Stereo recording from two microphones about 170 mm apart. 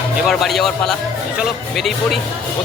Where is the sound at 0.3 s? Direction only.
Centre (ahead or behind).